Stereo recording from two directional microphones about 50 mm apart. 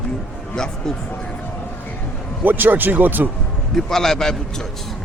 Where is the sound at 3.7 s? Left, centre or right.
Centre.